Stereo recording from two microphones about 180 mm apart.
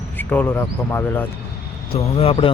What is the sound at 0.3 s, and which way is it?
Speech, 10° left (ahead or behind).